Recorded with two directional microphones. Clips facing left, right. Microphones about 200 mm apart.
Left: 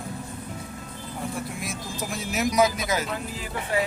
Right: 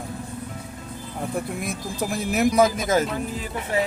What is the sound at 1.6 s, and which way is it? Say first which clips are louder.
Speech: right 5 dB; 55° right (ahead or behind).